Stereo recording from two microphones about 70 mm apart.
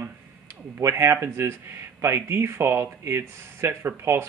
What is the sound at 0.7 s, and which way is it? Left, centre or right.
Speech, right.